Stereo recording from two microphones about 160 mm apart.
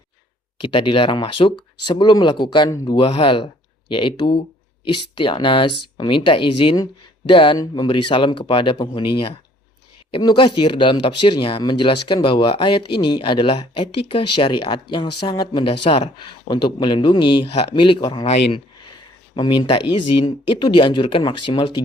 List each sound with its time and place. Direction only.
0.7 s speech: 30° left (ahead or behind)